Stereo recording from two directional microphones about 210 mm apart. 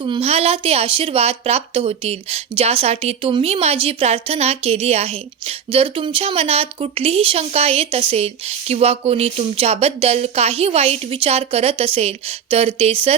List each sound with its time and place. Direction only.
0.0 s speech: 25° right (ahead or behind)